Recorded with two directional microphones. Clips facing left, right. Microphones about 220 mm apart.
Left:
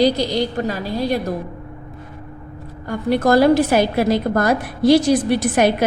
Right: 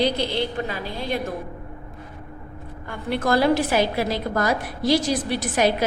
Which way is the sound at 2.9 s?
45° left (ahead or behind).